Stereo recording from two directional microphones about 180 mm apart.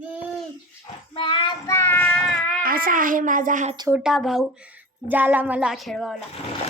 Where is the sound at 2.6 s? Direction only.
50° right (ahead or behind).